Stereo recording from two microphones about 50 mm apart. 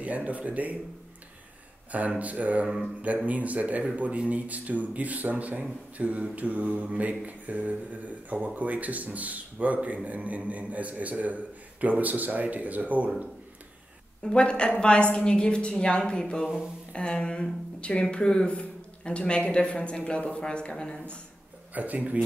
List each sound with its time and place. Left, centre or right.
0.0 s a man's voice: right
1.9 s a man's voice: right
5.9 s mantra: right
6.3 s a man's voice: right
14.2 s speech: left
21.7 s a man's voice: right